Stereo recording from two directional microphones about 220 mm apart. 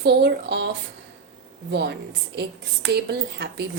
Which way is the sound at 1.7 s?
50° right (ahead or behind).